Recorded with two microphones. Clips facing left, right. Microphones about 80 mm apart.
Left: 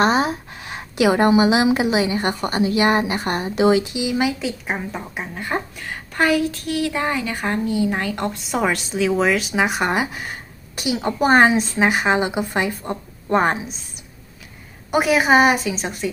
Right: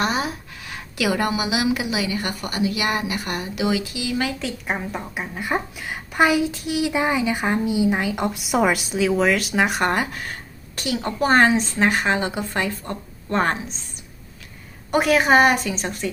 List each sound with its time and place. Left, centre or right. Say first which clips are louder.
0.0 s speech: left 6 dB; left
4.3 s a woman's voice: left 2 dB; centre
14.8 s speech: left 1 dB; centre